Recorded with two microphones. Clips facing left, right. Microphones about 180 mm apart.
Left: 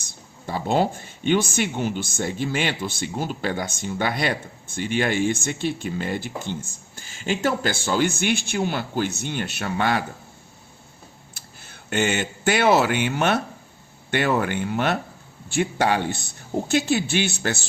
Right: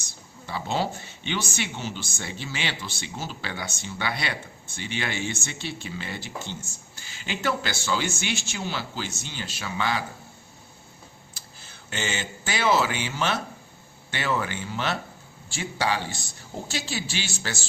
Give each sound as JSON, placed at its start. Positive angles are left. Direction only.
{"t": 0.4, "sound": "speech", "side_deg": 50}
{"t": 11.3, "sound": "speech", "side_deg": 60}